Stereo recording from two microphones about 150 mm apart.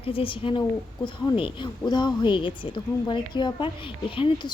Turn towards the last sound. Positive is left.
turn(degrees=35)  # may be behind; listen again after turning